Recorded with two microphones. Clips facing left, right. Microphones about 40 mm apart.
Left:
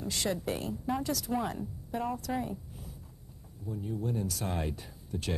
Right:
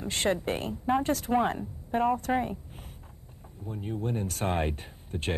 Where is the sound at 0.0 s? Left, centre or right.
Right.